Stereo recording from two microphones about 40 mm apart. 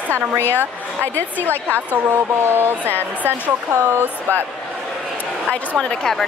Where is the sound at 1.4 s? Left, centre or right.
Right.